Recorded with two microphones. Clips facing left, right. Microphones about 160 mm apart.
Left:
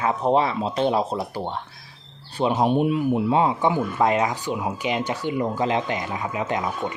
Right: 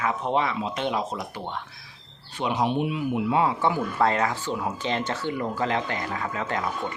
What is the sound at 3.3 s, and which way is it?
Speech, 20° left (ahead or behind).